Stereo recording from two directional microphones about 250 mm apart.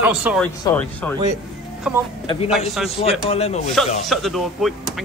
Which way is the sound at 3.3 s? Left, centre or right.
Left.